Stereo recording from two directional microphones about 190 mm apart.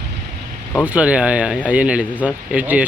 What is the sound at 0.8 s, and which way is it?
Speech, 5° right (ahead or behind).